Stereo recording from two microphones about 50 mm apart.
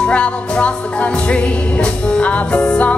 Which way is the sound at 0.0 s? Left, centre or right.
Left.